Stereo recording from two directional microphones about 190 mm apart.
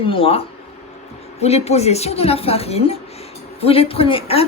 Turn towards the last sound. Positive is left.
turn(degrees=30)  # may be behind; listen again after turning